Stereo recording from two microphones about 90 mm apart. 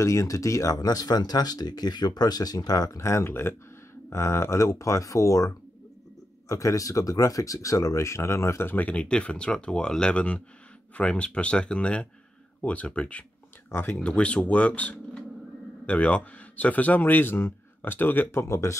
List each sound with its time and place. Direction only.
0.0 s speech: 35° left (ahead or behind); by 13.2 s 15° left (ahead or behind)
13.7 s speech: 25° left (ahead or behind)
14.0 s a man's voice: 15° left (ahead or behind); by 18.8 s 35° left (ahead or behind)